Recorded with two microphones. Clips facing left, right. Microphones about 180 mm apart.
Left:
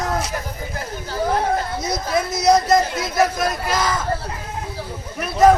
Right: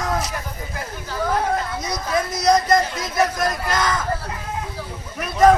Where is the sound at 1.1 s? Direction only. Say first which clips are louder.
Left 2 dB; 30° left (ahead or behind).